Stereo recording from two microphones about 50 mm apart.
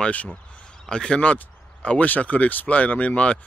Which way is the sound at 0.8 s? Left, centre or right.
Centre.